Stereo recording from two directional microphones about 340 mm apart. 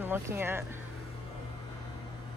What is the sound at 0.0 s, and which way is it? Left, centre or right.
Speech, centre.